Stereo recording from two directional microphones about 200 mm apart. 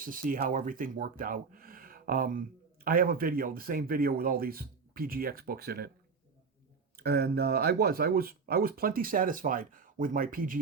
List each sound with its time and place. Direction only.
0.0 s speech: 45° right (ahead or behind)
6.9 s speech: 50° right (ahead or behind)